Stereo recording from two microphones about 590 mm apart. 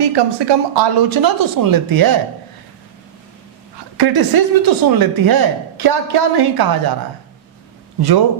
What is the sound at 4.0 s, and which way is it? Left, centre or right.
Speech, right.